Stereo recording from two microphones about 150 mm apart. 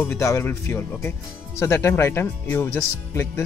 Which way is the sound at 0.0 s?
20° left (ahead or behind).